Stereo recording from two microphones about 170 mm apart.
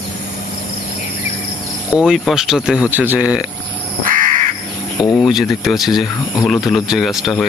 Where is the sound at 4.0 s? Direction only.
55° right (ahead or behind).